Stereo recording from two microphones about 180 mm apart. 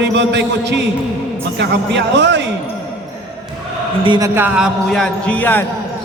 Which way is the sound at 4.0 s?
25° right (ahead or behind).